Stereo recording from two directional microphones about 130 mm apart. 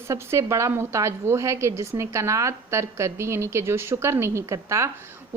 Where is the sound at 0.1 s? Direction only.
20° right (ahead or behind).